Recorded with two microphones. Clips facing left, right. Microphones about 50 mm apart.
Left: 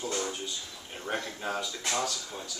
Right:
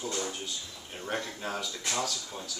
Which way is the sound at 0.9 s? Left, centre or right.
Centre.